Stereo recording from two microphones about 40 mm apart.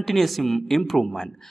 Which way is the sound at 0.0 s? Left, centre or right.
Centre.